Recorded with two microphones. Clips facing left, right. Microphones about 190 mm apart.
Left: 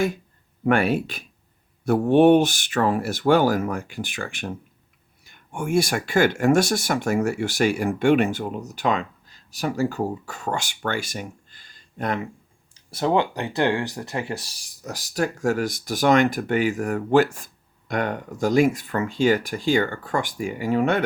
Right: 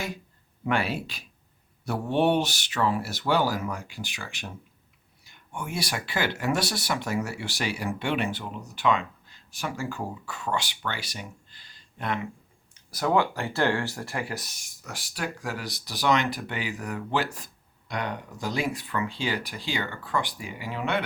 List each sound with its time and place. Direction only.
0.6 s speech: 50° left (ahead or behind)
12.7 s speech: 25° left (ahead or behind); by 21.0 s 45° left (ahead or behind)